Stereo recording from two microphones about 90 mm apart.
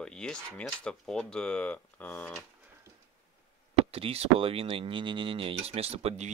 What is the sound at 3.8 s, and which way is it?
Speech, 90° right.